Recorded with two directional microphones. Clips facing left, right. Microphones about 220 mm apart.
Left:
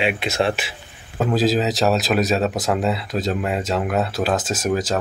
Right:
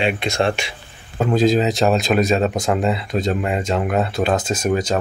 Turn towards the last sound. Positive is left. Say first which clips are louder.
# right 2 dB
turn(degrees=5)  # may be behind; listen again after turning